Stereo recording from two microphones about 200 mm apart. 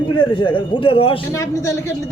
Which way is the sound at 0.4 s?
25° left (ahead or behind).